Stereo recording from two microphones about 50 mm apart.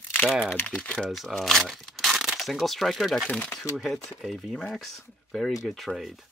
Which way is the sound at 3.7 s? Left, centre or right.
Centre.